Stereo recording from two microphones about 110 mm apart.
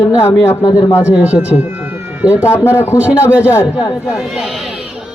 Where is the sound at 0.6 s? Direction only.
35° left (ahead or behind).